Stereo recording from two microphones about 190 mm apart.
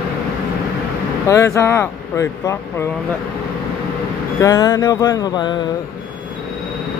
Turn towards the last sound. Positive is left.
turn(degrees=25)  # may be behind; listen again after turning